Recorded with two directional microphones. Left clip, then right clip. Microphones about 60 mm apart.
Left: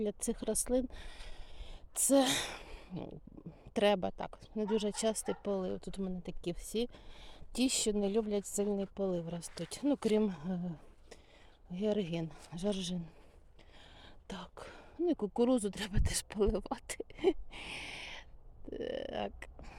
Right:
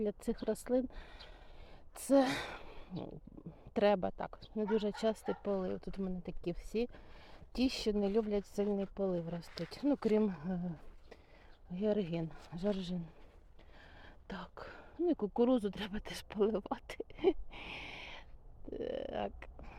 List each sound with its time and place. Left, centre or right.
0.0 s speech: left
0.4 s a sound: left
3.8 s speech: left